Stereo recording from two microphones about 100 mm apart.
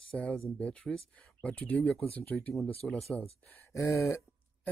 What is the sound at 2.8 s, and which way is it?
Speech, 5° left (ahead or behind).